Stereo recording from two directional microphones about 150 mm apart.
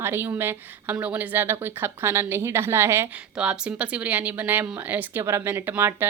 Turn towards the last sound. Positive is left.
turn(degrees=-15)  # may be behind; listen again after turning